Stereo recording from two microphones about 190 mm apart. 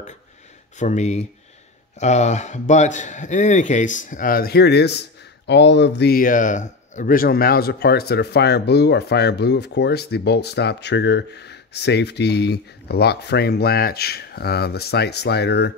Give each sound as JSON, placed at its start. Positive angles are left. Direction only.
{"t": 0.7, "sound": "a man's voice", "side_deg": 40}